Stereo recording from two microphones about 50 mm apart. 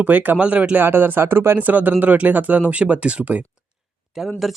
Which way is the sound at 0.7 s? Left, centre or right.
Right.